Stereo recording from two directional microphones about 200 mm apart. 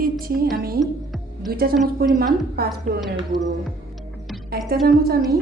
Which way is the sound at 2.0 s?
50° right (ahead or behind).